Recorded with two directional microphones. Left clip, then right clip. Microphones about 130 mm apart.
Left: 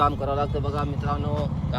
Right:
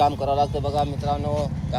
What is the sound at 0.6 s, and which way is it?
Speech, 50° left (ahead or behind).